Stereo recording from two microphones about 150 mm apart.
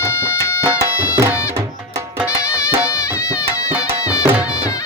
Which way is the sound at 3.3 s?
10° right (ahead or behind).